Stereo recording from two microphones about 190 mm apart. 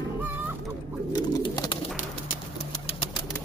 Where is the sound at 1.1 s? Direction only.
20° left (ahead or behind).